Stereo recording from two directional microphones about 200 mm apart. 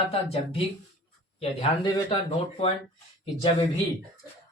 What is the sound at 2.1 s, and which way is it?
Speech, 30° left (ahead or behind).